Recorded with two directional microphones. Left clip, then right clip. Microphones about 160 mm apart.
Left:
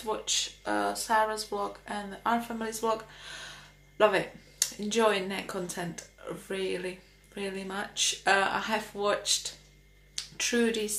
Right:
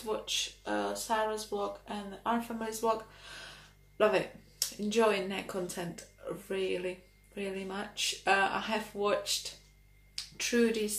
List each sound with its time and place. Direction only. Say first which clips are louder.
0.0 s speech: left 3 dB; 15° left (ahead or behind)
4.8 s speech: left 2 dB; 10° left (ahead or behind)
10.3 s speech: left 1 dB; 10° left (ahead or behind)